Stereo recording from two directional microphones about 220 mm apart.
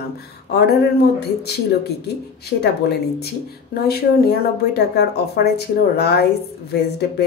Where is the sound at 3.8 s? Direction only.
45° left (ahead or behind).